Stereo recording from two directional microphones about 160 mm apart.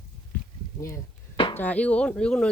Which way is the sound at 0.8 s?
15° left (ahead or behind).